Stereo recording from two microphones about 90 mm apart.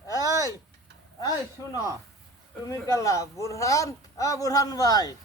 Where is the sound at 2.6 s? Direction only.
35° left (ahead or behind).